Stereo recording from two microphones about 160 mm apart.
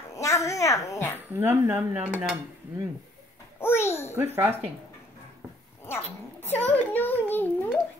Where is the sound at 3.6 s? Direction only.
15° left (ahead or behind).